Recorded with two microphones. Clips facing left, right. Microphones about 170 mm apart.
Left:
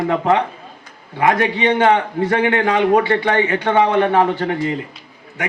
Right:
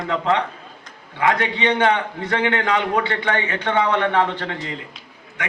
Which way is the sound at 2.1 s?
40° left (ahead or behind).